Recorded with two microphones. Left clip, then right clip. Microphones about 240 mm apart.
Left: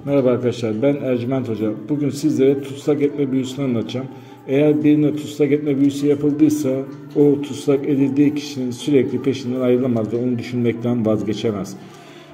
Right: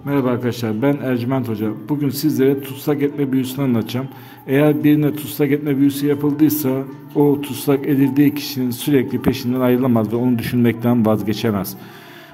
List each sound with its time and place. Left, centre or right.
0.3 s a man's voice: right